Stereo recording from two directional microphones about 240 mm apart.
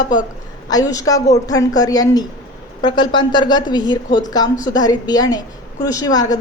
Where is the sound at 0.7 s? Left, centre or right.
Centre.